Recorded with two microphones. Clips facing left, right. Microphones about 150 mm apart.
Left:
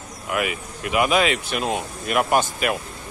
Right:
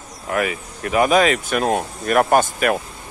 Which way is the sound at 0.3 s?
40° right (ahead or behind).